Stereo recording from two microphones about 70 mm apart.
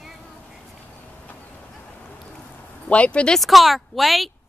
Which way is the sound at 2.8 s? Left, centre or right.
Centre.